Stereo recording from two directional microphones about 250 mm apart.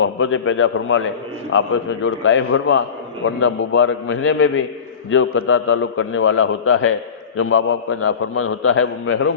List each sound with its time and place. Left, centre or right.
0.0 s a man's voice: left